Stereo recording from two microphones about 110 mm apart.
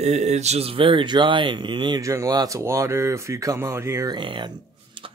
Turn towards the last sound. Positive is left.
turn(degrees=-45)  # may be behind; listen again after turning